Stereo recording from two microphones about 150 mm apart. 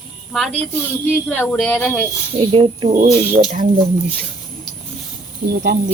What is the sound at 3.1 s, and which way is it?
Speech, 50° right (ahead or behind).